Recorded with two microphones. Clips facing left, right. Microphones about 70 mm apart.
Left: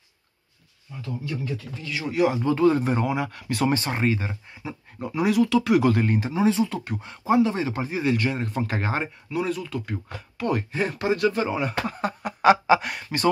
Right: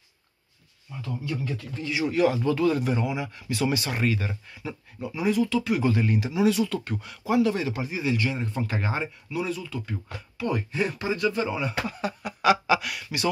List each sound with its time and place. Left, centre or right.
2.2 s speech: left
5.0 s speech: left
5.9 s speech: left